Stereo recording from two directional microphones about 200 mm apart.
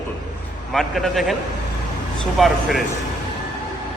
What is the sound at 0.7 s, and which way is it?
Speech, centre (ahead or behind).